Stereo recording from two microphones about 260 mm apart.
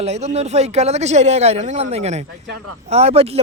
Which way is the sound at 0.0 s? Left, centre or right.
Right.